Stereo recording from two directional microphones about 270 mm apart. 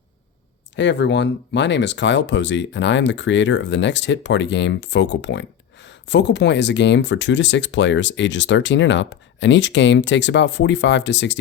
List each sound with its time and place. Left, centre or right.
0.8 s speech: left